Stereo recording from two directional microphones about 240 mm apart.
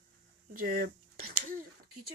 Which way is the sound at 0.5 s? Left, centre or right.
Right.